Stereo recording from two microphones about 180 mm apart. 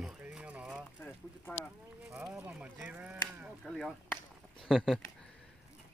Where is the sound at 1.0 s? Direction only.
10° left (ahead or behind).